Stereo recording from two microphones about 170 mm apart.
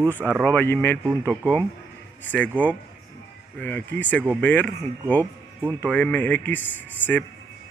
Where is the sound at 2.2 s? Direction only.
10° left (ahead or behind).